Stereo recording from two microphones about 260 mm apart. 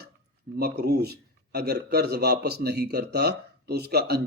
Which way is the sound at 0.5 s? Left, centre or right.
Right.